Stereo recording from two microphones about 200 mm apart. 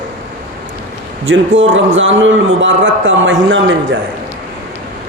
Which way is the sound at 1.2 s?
70° right (ahead or behind).